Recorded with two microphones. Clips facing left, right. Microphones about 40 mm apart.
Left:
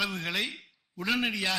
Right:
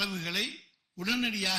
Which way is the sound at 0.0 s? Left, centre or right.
Centre.